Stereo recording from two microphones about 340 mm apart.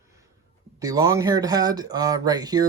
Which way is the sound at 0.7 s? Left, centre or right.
Centre.